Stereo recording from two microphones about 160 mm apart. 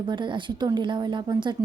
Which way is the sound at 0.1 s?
30° right (ahead or behind).